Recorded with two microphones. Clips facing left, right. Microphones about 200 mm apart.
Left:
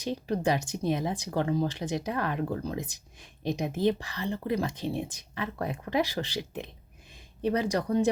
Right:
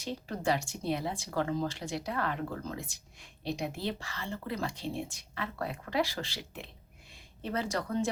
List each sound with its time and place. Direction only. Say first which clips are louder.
0.0 s speech: left 5 dB; 20° left (ahead or behind)